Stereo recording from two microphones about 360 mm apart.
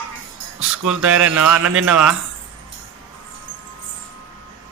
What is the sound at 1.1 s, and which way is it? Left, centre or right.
Speech, centre.